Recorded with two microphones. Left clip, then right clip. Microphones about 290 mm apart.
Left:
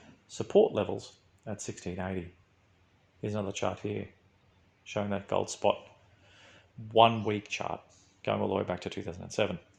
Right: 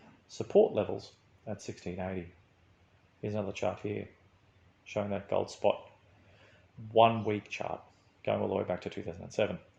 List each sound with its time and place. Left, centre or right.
0.3 s speech: left
6.9 s speech: left